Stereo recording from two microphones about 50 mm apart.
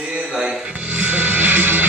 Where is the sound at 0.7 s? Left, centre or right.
Right.